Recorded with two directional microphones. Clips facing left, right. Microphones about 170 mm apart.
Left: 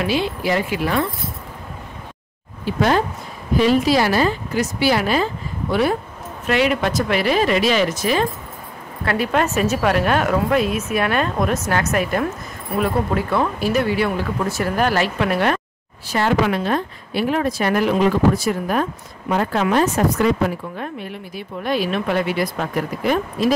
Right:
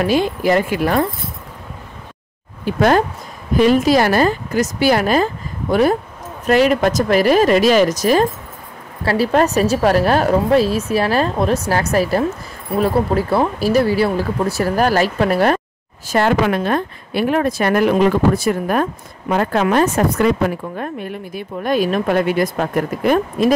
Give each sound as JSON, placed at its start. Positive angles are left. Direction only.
{"t": 0.0, "sound": "speech", "side_deg": -45}
{"t": 2.6, "sound": "a woman's voice", "side_deg": -50}
{"t": 16.1, "sound": "speech", "side_deg": -50}